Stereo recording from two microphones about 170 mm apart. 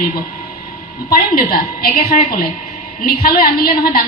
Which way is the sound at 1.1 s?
60° left (ahead or behind).